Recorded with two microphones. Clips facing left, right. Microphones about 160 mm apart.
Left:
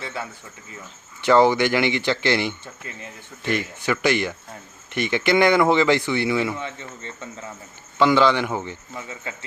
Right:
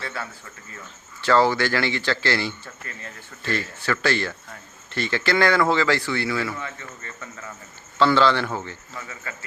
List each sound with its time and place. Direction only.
0.0 s speech: 20° left (ahead or behind)